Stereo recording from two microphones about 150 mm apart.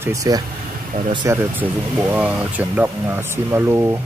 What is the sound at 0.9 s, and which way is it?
Speech, 70° right (ahead or behind).